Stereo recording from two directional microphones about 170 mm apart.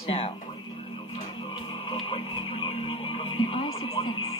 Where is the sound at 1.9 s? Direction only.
30° left (ahead or behind).